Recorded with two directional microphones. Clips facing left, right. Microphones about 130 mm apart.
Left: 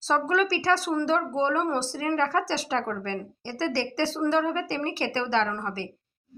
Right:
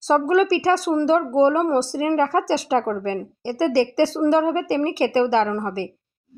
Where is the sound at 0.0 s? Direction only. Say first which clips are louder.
Right 7 dB; 40° right (ahead or behind).